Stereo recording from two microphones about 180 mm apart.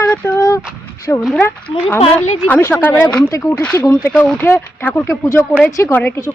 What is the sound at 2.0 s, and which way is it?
Speech, 40° left (ahead or behind).